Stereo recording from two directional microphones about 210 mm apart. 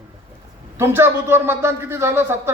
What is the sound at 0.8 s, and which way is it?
Speech, 10° right (ahead or behind).